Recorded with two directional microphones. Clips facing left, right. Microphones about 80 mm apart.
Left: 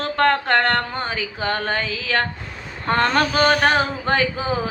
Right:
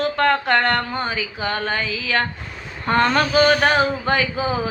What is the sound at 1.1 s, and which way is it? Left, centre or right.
Female singing, left.